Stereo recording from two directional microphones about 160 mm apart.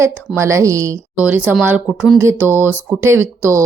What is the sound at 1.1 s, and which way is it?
Speech, 10° right (ahead or behind).